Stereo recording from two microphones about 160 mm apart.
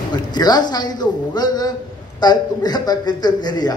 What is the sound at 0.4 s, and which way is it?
A man's voice, 25° left (ahead or behind).